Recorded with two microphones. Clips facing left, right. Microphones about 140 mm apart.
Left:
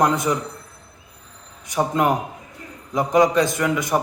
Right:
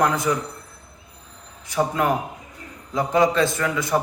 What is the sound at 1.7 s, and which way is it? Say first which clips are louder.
Speech: left 2 dB; 20° left (ahead or behind).